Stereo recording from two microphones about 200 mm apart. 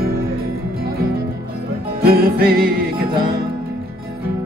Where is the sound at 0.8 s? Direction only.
50° right (ahead or behind).